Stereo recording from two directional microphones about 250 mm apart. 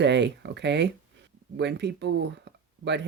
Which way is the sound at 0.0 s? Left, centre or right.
Right.